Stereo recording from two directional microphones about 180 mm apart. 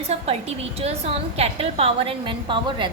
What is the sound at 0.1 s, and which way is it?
A woman's voice, 35° right (ahead or behind).